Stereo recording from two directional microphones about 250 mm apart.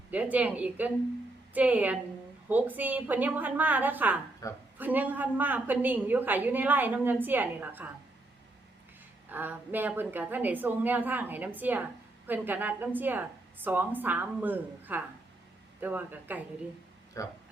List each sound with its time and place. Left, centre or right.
0.1 s a woman's voice: centre
4.4 s speech: centre
4.8 s a woman's voice: centre
9.3 s a woman's voice: centre
17.2 s speech: centre